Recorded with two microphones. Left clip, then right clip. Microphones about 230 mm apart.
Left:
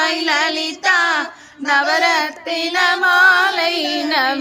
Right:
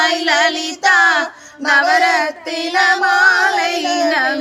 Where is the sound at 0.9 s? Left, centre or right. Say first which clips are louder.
Right 5 dB; centre.